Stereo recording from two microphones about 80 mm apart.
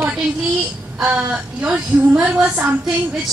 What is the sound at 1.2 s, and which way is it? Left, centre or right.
A woman's voice, centre.